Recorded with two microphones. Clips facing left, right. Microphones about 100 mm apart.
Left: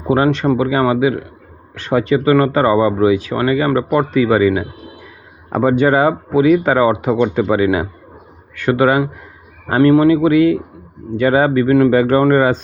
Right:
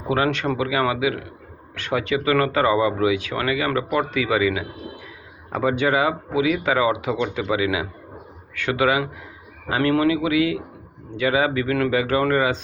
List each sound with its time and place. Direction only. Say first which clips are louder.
0.1 s speech: left 7 dB; 35° left (ahead or behind)